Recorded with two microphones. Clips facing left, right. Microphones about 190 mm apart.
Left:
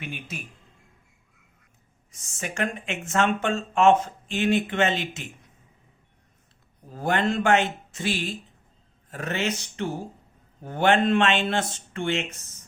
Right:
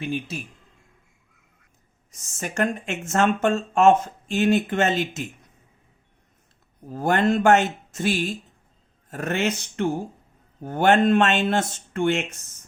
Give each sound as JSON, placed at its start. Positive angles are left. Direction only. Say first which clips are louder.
{"t": 0.0, "sound": "speech", "louder": "right 8 dB", "side_deg": -30}
{"t": 2.4, "sound": "speech", "louder": "right 4 dB", "side_deg": -45}
{"t": 7.0, "sound": "speech", "louder": "right 4 dB", "side_deg": -45}